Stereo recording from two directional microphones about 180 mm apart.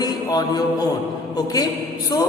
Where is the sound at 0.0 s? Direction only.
20° left (ahead or behind).